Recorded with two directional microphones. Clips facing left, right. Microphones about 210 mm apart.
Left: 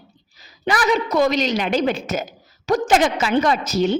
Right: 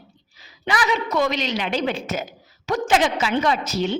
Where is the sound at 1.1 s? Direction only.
40° left (ahead or behind).